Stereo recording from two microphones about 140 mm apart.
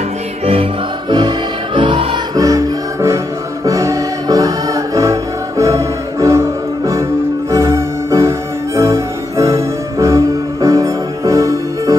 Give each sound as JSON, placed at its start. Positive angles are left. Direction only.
{"t": 1.8, "sound": "music", "side_deg": -35}
{"t": 2.4, "sound": "music", "side_deg": -20}